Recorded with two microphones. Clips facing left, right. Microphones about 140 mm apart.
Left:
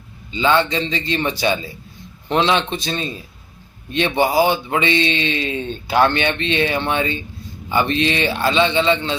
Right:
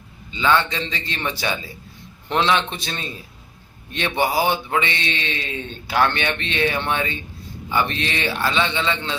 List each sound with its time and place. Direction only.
0.3 s speech: 25° left (ahead or behind)